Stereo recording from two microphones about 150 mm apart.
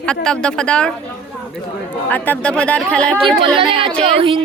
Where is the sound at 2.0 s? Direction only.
10° left (ahead or behind).